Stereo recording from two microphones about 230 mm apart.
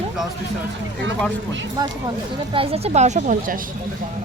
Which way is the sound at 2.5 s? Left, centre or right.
Right.